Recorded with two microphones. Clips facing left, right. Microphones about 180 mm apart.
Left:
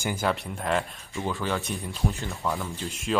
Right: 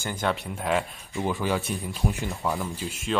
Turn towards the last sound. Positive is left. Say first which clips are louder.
# even
turn(degrees=-5)  # may be behind; listen again after turning